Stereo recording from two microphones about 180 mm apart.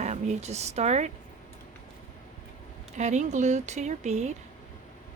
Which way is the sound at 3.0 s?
40° right (ahead or behind).